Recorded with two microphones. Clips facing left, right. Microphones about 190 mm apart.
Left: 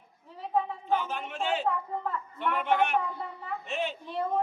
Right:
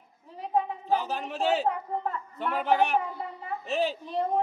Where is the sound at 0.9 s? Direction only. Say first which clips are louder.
Right 2 dB; 35° right (ahead or behind).